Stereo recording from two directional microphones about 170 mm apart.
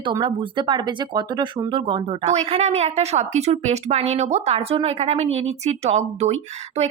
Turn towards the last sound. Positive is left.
turn(degrees=-40)  # may be behind; listen again after turning